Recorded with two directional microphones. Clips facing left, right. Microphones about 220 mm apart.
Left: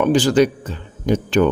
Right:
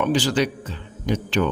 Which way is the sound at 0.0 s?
50° left (ahead or behind).